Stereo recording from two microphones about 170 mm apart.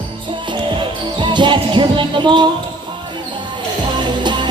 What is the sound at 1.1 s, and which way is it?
Music, 25° right (ahead or behind).